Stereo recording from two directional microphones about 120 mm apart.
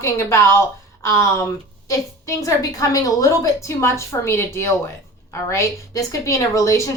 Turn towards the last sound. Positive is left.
turn(degrees=25)  # may be behind; listen again after turning